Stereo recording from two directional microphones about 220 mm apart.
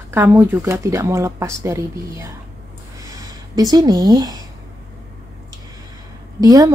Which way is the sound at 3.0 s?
15° right (ahead or behind).